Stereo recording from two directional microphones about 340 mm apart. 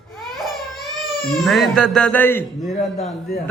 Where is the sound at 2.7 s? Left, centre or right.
Centre.